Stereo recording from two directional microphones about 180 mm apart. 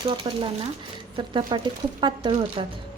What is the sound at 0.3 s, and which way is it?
Speech, 25° right (ahead or behind).